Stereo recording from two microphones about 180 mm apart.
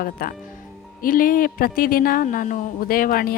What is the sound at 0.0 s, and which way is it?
Speech, 55° left (ahead or behind).